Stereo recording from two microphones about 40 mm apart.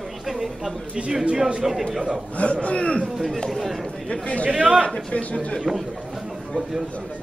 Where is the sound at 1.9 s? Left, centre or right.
Centre.